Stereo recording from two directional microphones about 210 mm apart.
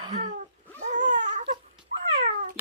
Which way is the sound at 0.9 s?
35° right (ahead or behind).